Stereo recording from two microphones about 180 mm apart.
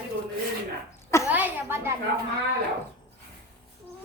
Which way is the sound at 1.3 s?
10° right (ahead or behind).